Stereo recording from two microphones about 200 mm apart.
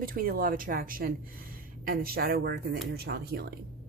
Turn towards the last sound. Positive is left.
turn(degrees=-50)  # may be behind; listen again after turning